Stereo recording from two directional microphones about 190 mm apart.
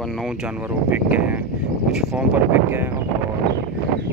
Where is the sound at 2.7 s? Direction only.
10° right (ahead or behind).